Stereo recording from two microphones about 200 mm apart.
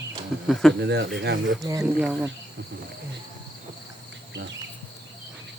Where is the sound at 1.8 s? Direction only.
5° right (ahead or behind).